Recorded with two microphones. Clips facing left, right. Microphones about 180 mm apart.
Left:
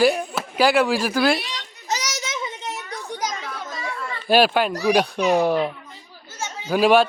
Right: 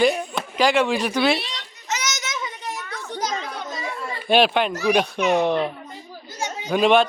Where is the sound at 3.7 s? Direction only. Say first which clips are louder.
Right 1 dB; 20° right (ahead or behind).